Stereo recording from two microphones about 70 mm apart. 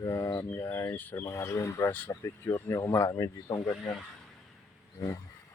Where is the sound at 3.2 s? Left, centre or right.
Left.